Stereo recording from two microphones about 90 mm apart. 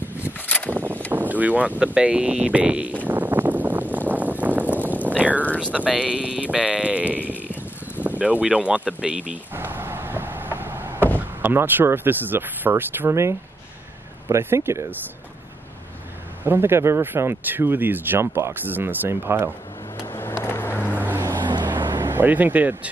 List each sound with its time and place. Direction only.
0.7 s a sound: 20° right (ahead or behind)
1.1 s wind: 20° right (ahead or behind)
4.1 s a sound: 20° right (ahead or behind)
5.8 s speech: 10° right (ahead or behind)
9.5 s a sound: 25° right (ahead or behind)
11.1 s speech: 20° right (ahead or behind)
16.4 s speech: 25° right (ahead or behind)
20.2 s vehicle: 25° left (ahead or behind)
21.4 s boat: 55° right (ahead or behind)
22.0 s speech: 25° right (ahead or behind)